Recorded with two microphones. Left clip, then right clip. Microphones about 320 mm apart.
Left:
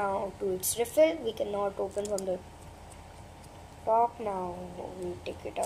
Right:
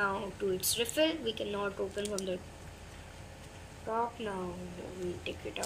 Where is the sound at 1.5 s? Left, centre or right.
Centre.